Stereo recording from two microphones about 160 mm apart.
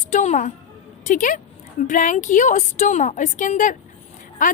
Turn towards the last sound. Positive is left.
turn(degrees=55)  # may be behind; listen again after turning